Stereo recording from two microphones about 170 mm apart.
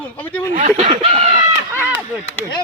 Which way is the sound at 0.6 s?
45° right (ahead or behind).